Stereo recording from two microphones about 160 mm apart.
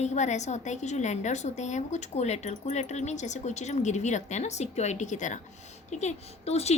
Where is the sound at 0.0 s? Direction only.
45° left (ahead or behind).